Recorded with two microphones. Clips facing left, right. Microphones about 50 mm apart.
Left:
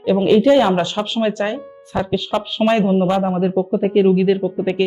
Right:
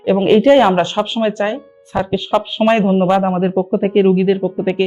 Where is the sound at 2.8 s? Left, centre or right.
Right.